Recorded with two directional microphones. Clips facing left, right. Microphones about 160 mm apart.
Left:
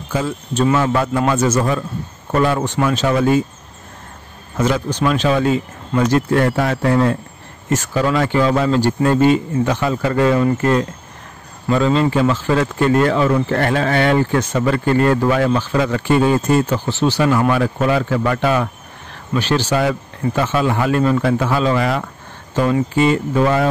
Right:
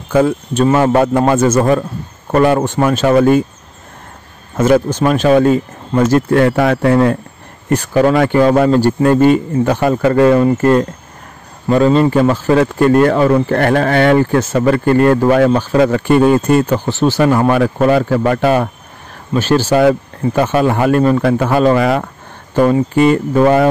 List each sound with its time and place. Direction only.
0.1 s speech: 55° right (ahead or behind)
4.6 s speech: 50° right (ahead or behind)
19.7 s speech: 55° right (ahead or behind)